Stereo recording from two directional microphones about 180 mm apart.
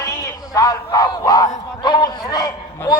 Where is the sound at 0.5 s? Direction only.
20° left (ahead or behind).